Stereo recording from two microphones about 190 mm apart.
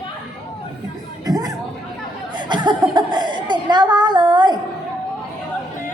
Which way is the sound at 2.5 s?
25° right (ahead or behind).